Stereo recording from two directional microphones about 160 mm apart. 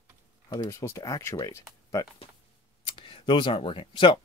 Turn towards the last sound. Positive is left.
turn(degrees=30)  # may be behind; listen again after turning